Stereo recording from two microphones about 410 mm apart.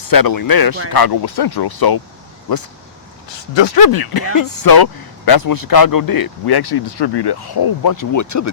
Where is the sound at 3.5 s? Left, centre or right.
Left.